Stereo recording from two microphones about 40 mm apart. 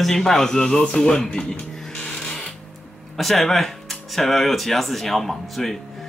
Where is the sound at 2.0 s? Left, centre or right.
Centre.